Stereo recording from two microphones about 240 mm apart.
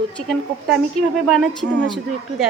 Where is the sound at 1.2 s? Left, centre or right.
Centre.